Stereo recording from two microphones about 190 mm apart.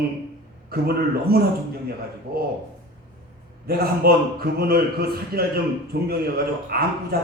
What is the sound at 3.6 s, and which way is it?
A man's voice, 55° right (ahead or behind).